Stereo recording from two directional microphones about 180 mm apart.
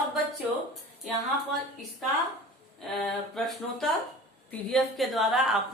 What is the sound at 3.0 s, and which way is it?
A woman's voice, centre (ahead or behind).